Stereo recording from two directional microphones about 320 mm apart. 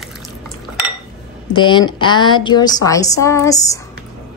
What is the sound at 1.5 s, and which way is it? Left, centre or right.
A woman's voice, centre.